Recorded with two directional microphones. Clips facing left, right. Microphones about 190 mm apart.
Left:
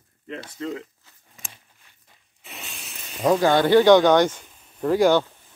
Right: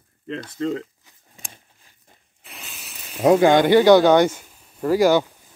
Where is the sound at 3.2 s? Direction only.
15° right (ahead or behind).